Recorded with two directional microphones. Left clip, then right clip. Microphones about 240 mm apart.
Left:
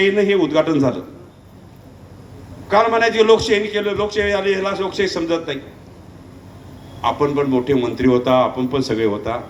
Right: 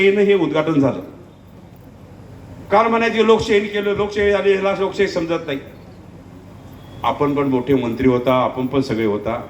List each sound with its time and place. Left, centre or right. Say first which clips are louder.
0.0 s a man's voice: right 1 dB; left
2.6 s a man's voice: left 1 dB; left
7.0 s a man's voice: even; left